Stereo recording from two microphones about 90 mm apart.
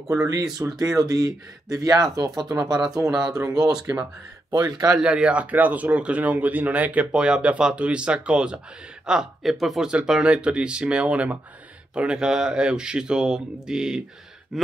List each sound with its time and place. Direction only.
0.3 s speech: 40° right (ahead or behind)
3.1 s speech: 5° right (ahead or behind)
3.4 s speech: 45° right (ahead or behind)
4.9 s speech: 10° right (ahead or behind)
14.5 s a sound: centre (ahead or behind)